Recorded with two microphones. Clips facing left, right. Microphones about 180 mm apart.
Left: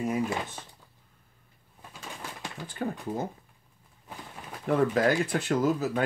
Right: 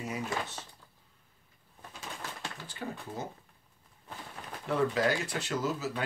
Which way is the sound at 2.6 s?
50° left (ahead or behind).